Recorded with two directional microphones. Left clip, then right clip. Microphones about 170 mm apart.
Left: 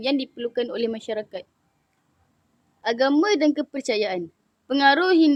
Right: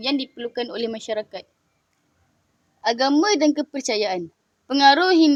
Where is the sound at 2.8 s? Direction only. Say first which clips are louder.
Right 1 dB; 30° right (ahead or behind).